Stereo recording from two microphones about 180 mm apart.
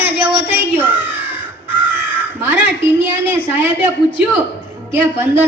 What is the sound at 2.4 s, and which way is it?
A man's voice, 10° right (ahead or behind).